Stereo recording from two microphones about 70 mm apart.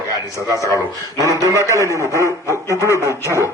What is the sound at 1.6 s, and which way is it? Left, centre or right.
A man's voice, left.